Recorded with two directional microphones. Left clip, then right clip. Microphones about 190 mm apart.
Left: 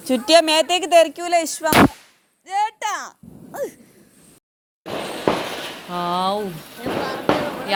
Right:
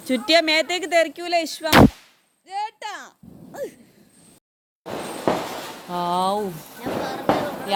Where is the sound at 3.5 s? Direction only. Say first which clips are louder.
Left 4 dB; 10° left (ahead or behind).